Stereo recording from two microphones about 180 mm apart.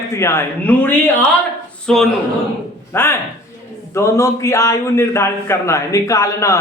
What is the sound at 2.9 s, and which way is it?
A man's voice, 15° left (ahead or behind).